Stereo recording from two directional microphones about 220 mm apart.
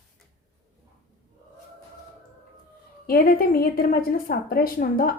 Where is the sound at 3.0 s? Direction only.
40° left (ahead or behind).